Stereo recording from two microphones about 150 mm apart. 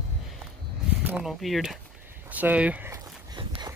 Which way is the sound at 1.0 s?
10° right (ahead or behind).